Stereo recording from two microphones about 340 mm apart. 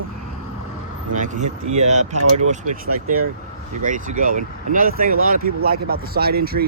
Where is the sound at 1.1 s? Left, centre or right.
Right.